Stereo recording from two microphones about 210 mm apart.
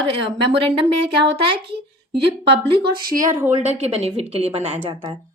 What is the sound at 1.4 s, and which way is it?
A woman's voice, 50° right (ahead or behind).